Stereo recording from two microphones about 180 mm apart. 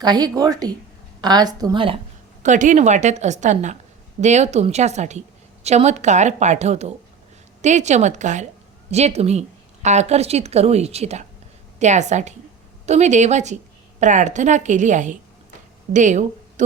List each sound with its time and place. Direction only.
0.0 s a woman's voice: 20° right (ahead or behind)
2.4 s a woman's voice: 45° right (ahead or behind)